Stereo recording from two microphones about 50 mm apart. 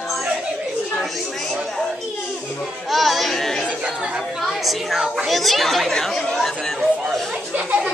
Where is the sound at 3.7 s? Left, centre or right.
Right.